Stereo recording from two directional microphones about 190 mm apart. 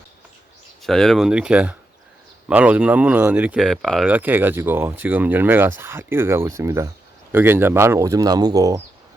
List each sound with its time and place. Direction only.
0.8 s speech: centre (ahead or behind); by 8.8 s 20° right (ahead or behind)